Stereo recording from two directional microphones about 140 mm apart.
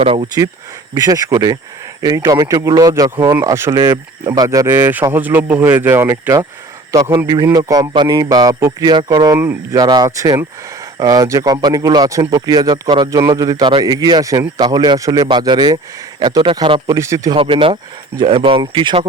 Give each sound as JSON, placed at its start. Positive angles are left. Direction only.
{"t": 0.0, "sound": "speech", "side_deg": -45}
{"t": 0.9, "sound": "speech", "side_deg": -25}
{"t": 3.9, "sound": "speech", "side_deg": -30}
{"t": 17.3, "sound": "speech", "side_deg": -40}